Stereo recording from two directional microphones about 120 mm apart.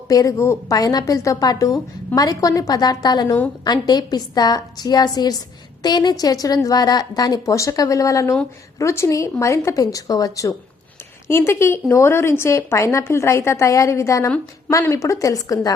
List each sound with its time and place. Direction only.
0.1 s a woman's voice: 30° left (ahead or behind)